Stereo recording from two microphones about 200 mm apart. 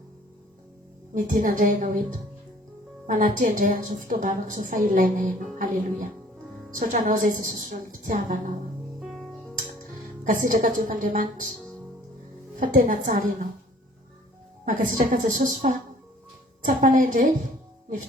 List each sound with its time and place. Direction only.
1.1 s a woman's voice: 40° right (ahead or behind)
3.1 s a woman's voice: 40° right (ahead or behind)
9.0 s music: 5° right (ahead or behind)
9.6 s music: 45° right (ahead or behind)
12.7 s a woman's voice: 45° right (ahead or behind)
14.6 s a woman's voice: 45° right (ahead or behind)